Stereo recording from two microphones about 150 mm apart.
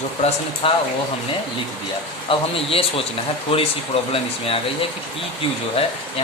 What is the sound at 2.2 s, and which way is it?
A man's voice, 40° left (ahead or behind).